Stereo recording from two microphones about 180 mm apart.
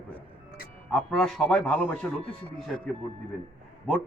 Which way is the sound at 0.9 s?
Centre (ahead or behind).